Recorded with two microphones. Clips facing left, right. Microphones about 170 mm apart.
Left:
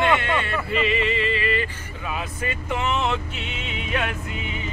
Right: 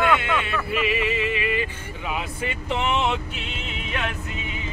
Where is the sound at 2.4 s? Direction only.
20° right (ahead or behind).